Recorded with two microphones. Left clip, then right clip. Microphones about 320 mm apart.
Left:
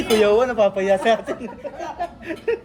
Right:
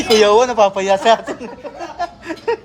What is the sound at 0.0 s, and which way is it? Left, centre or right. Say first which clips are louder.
Speech: right 5 dB; centre.